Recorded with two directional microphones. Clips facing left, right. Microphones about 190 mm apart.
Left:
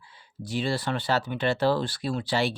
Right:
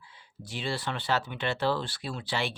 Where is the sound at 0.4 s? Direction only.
40° left (ahead or behind).